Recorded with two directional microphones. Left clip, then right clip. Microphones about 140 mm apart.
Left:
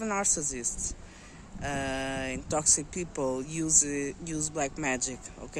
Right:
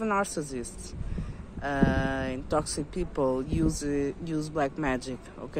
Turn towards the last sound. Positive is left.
turn(degrees=15)  # may be behind; listen again after turning